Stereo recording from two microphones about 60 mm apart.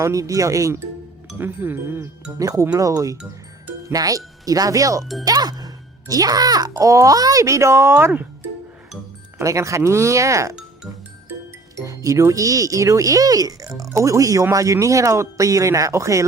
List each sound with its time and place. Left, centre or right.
0.0 s speech: right
1.4 s speech: right
2.4 s speech: right
3.9 s speech: right
5.2 s speech: right
9.4 s speech: right
11.8 s speech: right